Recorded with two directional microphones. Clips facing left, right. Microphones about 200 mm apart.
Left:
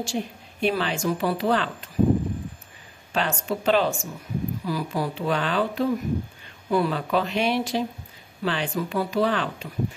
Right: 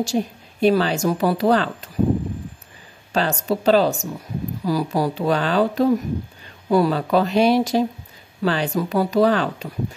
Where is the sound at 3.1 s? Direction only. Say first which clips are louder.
Right 5 dB; 40° right (ahead or behind).